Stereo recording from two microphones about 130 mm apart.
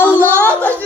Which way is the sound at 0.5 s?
10° left (ahead or behind).